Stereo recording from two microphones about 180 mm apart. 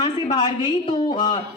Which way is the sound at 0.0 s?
25° left (ahead or behind).